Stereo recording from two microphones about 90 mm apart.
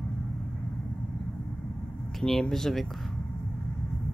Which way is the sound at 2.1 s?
5° left (ahead or behind).